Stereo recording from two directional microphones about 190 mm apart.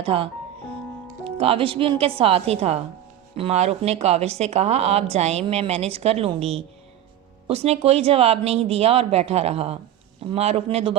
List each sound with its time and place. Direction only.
0.0 s a woman's voice: 30° right (ahead or behind)